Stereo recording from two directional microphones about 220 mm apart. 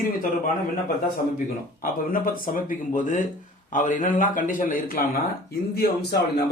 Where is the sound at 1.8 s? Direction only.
40° left (ahead or behind).